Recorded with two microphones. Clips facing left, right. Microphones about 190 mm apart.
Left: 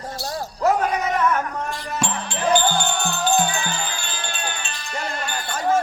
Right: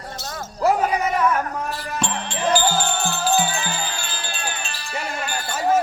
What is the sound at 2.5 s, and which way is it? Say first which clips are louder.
Music: left 1 dB; 5° right (ahead or behind).